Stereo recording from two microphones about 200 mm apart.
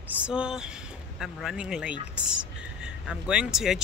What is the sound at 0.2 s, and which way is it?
Speech, 5° right (ahead or behind).